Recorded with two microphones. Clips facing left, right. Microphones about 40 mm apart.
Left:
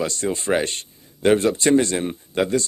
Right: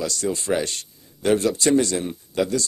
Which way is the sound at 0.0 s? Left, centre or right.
Left.